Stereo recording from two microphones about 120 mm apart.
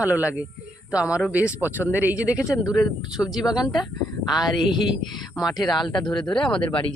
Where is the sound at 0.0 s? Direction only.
15° right (ahead or behind).